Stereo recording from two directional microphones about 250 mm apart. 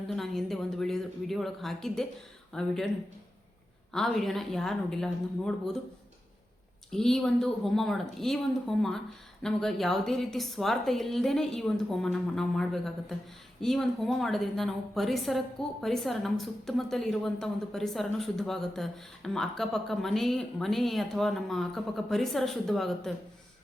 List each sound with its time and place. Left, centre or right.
0.1 s a woman's voice: centre
3.9 s a woman's voice: centre
6.9 s a woman's voice: centre